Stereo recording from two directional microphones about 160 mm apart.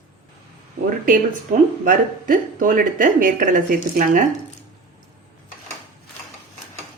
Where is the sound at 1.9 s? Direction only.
60° right (ahead or behind).